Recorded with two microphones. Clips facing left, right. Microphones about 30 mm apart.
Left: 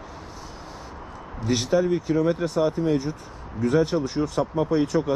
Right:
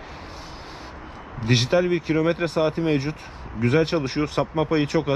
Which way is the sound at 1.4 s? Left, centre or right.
Right.